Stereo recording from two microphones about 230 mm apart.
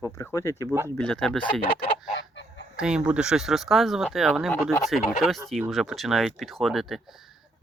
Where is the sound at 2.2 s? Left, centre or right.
Left.